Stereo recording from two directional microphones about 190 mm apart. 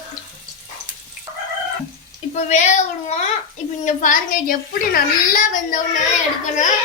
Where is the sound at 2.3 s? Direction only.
40° left (ahead or behind).